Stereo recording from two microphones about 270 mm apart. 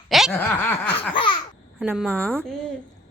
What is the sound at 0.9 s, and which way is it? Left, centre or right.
Laughter, centre.